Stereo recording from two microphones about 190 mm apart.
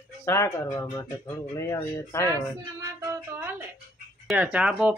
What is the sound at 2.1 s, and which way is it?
Speech, 15° left (ahead or behind).